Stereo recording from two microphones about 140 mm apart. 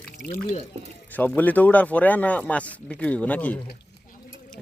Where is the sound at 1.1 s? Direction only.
10° left (ahead or behind).